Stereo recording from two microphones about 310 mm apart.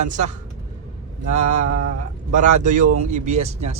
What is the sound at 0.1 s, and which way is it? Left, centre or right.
Speech, right.